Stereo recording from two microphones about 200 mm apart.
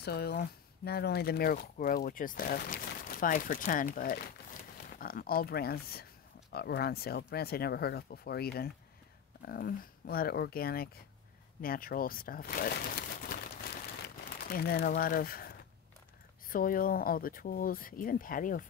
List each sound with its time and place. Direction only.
0.0 s speech: 55° left (ahead or behind)
14.0 s crumpling: 50° left (ahead or behind)
14.9 s speech: 45° left (ahead or behind)